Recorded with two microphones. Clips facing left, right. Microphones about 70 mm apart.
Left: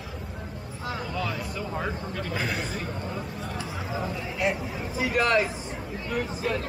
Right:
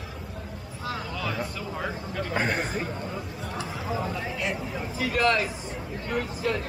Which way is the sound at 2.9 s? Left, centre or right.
Centre.